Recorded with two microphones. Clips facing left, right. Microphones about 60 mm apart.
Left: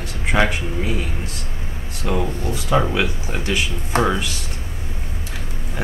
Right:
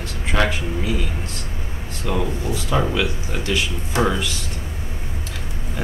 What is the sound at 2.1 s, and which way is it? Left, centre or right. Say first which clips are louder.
Speech: left 1 dB; centre.